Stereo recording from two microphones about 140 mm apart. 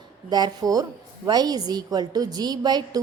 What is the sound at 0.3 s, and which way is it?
A woman's voice, 30° right (ahead or behind).